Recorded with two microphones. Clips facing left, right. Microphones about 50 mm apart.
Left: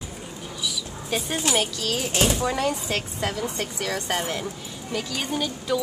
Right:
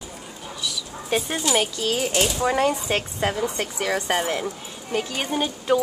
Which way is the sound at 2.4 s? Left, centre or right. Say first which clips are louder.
Right 4 dB; right.